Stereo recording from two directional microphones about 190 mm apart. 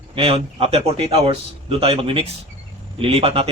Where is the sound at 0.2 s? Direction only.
30° right (ahead or behind).